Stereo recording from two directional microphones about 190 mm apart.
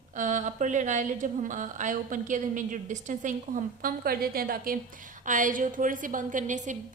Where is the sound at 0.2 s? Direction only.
40° right (ahead or behind).